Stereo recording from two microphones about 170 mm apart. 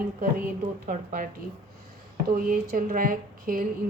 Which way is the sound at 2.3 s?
55° right (ahead or behind).